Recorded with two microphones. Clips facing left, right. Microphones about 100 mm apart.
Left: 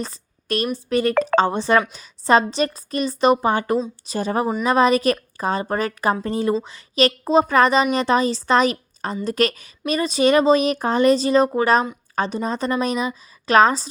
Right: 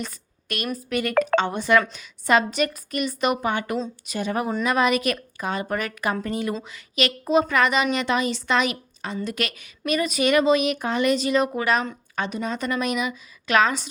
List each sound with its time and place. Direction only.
0.0 s a woman's voice: 35° left (ahead or behind)